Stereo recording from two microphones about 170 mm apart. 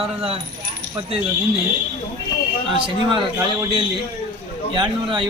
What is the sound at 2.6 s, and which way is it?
Speech, 30° right (ahead or behind).